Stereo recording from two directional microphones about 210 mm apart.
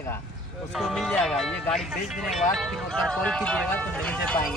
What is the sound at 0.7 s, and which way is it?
Speech, centre (ahead or behind).